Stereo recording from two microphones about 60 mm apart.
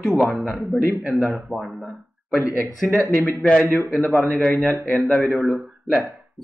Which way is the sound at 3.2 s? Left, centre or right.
Left.